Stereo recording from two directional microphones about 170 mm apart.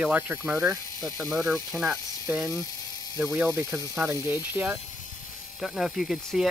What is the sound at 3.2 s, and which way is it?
Speech, 15° right (ahead or behind).